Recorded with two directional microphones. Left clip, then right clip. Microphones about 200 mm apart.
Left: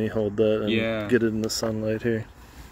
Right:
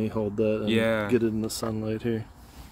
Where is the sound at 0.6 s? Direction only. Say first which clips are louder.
Right 1 dB; 35° right (ahead or behind).